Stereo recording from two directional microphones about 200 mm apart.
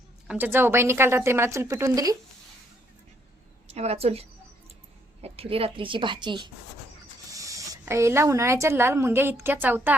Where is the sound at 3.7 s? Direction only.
30° right (ahead or behind); by 9.9 s 10° right (ahead or behind).